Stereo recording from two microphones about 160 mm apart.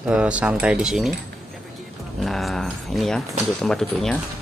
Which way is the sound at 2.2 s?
Centre (ahead or behind).